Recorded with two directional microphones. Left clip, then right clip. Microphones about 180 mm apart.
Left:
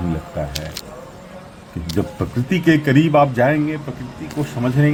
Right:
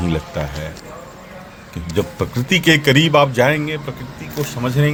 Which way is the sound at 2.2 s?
15° right (ahead or behind).